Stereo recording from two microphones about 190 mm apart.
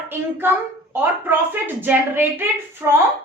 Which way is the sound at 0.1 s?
10° right (ahead or behind).